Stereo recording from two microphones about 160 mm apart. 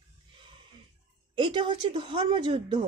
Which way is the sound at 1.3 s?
30° right (ahead or behind).